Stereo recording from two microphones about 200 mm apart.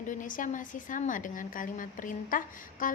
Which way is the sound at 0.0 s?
40° left (ahead or behind).